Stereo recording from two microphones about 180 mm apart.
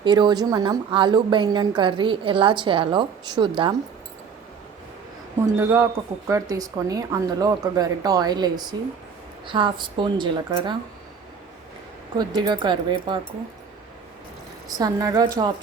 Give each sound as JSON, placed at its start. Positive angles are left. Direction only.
{"t": 0.0, "sound": "a woman's voice", "side_deg": -25}
{"t": 5.5, "sound": "a woman's voice", "side_deg": -15}
{"t": 12.1, "sound": "a woman's voice", "side_deg": -25}
{"t": 14.7, "sound": "a woman's voice", "side_deg": -20}